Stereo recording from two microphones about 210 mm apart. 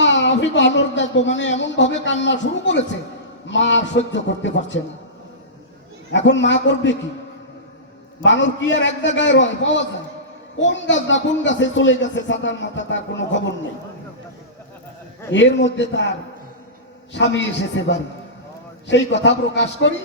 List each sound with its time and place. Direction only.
0.0 s a woman's voice: 60° left (ahead or behind)
6.1 s speech: 60° left (ahead or behind)
8.2 s speech: 60° left (ahead or behind)
15.3 s speech: 60° left (ahead or behind)